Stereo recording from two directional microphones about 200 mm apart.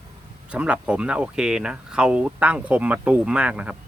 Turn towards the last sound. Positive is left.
turn(degrees=-5)  # may be behind; listen again after turning